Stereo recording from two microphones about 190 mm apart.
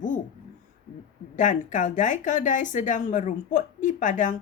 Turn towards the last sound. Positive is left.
turn(degrees=40)  # may be behind; listen again after turning